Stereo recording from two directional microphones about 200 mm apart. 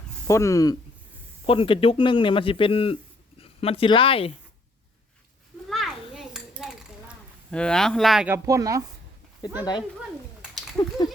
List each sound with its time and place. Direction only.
0.3 s a man's voice: 15° left (ahead or behind)
5.6 s a sound: centre (ahead or behind)
8.4 s a woman's voice: 15° right (ahead or behind)
9.4 s a man's voice: 20° left (ahead or behind)
10.8 s speech: 15° left (ahead or behind)